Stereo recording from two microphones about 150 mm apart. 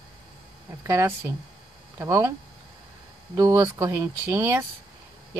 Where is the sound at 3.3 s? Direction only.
20° right (ahead or behind).